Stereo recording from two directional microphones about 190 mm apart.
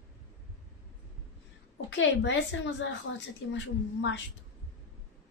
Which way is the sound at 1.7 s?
75° left (ahead or behind).